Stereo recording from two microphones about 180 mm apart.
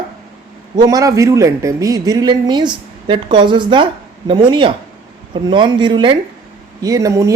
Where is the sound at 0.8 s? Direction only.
20° right (ahead or behind).